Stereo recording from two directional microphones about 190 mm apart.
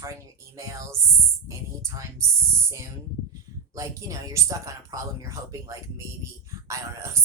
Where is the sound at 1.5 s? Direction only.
15° right (ahead or behind).